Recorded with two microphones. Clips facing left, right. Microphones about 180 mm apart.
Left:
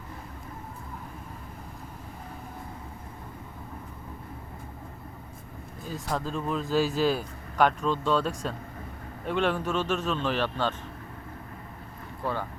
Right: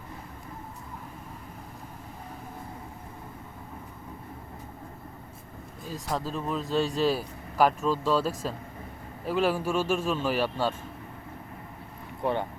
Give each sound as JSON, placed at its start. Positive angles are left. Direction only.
{"t": 5.9, "sound": "a man's voice", "side_deg": 0}
{"t": 12.2, "sound": "speech", "side_deg": -20}